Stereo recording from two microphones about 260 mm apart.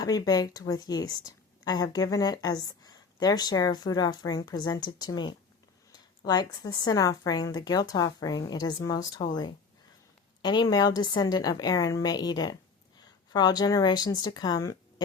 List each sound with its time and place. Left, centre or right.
0.0 s a woman's voice: centre